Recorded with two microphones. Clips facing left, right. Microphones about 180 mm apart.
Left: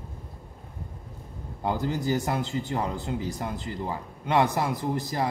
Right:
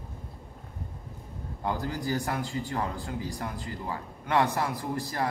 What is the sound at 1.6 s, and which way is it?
A man's voice, 20° left (ahead or behind).